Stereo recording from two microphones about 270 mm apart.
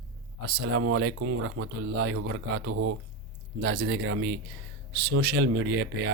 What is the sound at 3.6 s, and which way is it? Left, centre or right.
Speech, right.